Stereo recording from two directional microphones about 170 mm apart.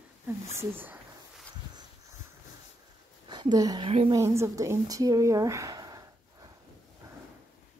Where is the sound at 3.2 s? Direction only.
25° right (ahead or behind).